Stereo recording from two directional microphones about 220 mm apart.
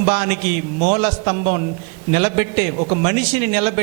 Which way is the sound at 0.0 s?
20° right (ahead or behind).